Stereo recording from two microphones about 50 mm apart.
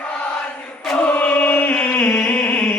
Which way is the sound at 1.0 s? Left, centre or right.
Left.